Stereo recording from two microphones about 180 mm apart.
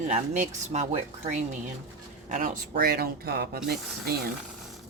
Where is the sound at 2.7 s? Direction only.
55° right (ahead or behind).